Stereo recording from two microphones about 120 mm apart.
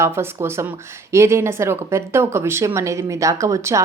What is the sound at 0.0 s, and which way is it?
Speech, 20° right (ahead or behind).